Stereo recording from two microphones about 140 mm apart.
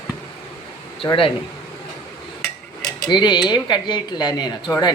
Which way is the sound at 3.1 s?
35° left (ahead or behind).